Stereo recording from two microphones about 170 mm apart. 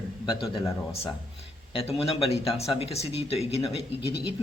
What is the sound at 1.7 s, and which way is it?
Speech, 35° left (ahead or behind).